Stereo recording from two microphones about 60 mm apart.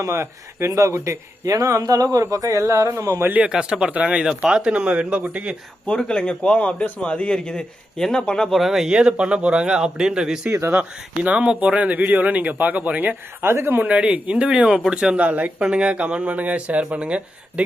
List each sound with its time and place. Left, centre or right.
0.1 s speech: right
0.9 s speech: right
1.5 s speech: right
2.3 s a sound: right
2.8 s speech: right
3.4 s speech: centre
5.8 s a man's voice: centre
8.5 s speech: centre
10.8 s speech: right
13.4 s speech: right
13.8 s speech: centre